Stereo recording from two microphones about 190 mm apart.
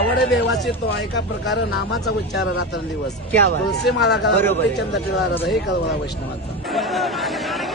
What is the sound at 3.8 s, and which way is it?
Speech, 65° left (ahead or behind).